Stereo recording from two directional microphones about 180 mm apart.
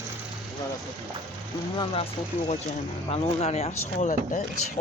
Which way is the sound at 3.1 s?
35° left (ahead or behind).